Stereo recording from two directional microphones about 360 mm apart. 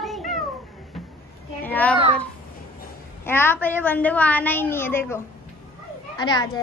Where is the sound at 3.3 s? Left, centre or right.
Centre.